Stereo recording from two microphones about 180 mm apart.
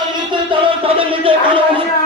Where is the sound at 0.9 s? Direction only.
30° right (ahead or behind).